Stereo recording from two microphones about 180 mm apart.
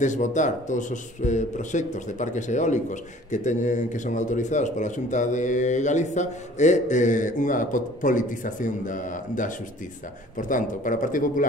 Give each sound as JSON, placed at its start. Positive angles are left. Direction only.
{"t": 0.0, "sound": "speech", "side_deg": 45}